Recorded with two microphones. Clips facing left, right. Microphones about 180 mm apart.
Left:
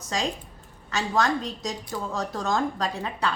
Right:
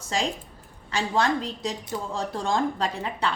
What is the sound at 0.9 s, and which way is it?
A woman's voice, 30° right (ahead or behind).